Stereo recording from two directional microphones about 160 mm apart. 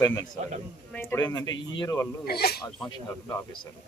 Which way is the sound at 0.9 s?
10° left (ahead or behind).